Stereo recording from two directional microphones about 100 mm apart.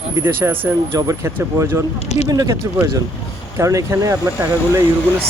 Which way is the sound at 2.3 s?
40° right (ahead or behind).